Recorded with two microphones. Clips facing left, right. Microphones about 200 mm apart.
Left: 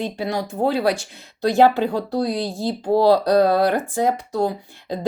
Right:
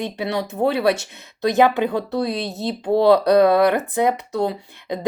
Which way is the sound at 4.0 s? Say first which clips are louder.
Even; 65° right (ahead or behind).